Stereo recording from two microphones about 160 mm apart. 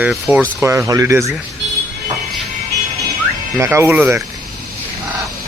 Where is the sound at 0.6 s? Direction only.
15° right (ahead or behind).